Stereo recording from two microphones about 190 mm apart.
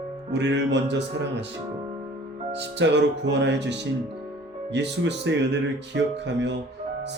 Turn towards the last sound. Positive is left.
turn(degrees=-70)  # may be behind; listen again after turning